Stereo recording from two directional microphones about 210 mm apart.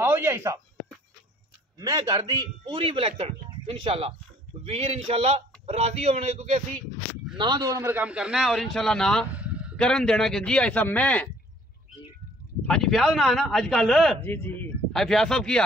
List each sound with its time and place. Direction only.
0.0 s speech: 10° right (ahead or behind)
1.8 s speech: 15° right (ahead or behind); by 6.8 s 30° right (ahead or behind)
7.3 s a man's voice: 20° right (ahead or behind); by 11.2 s 5° left (ahead or behind)
12.6 s a man's voice: centre (ahead or behind)